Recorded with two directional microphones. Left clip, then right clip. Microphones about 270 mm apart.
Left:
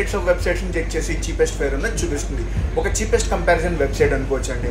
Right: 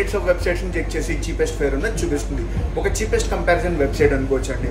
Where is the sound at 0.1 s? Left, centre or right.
Centre.